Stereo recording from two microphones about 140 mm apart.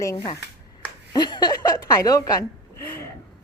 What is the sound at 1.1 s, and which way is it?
A woman's voice, 30° left (ahead or behind).